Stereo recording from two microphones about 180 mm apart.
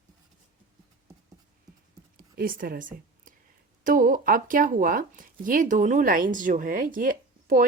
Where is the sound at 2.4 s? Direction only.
55° right (ahead or behind).